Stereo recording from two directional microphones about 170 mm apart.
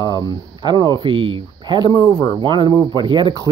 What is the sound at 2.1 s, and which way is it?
Speech, 30° right (ahead or behind).